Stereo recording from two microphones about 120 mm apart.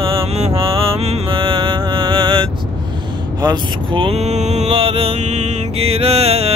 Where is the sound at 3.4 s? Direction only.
45° right (ahead or behind).